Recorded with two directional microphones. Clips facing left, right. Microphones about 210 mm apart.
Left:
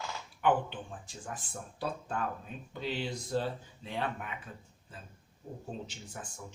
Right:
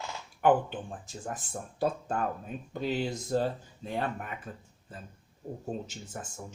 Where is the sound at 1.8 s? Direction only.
45° right (ahead or behind).